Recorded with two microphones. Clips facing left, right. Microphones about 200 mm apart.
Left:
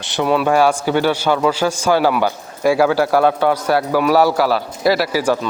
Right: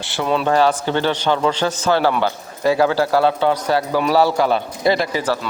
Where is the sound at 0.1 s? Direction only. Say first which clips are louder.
Left 3 dB; 15° left (ahead or behind).